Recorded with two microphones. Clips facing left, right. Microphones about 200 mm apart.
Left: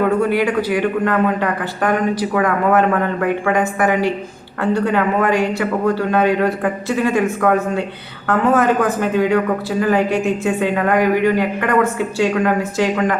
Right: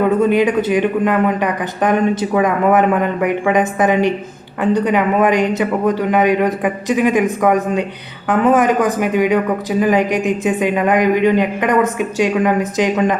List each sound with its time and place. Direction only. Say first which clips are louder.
0.0 s a man's voice: right 3 dB; 20° right (ahead or behind)